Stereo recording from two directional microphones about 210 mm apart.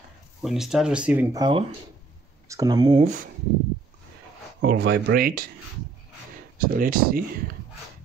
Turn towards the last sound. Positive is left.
turn(degrees=-40)  # may be behind; listen again after turning